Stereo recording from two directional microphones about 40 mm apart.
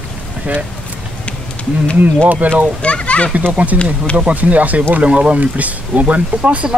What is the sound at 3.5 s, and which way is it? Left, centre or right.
Speech, right.